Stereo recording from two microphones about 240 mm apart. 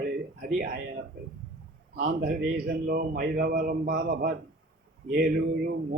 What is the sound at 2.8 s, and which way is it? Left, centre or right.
A man's voice, right.